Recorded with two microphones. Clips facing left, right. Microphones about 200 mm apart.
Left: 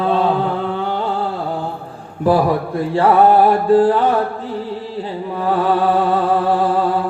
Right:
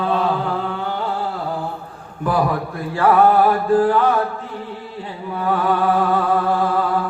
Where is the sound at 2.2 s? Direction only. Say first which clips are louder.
Left 5 dB; 30° left (ahead or behind).